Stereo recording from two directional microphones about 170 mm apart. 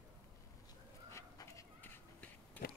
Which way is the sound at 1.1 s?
15° left (ahead or behind).